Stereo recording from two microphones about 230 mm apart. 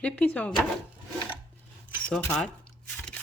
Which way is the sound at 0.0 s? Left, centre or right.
Centre.